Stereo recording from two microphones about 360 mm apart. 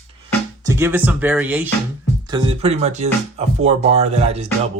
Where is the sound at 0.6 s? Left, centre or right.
Centre.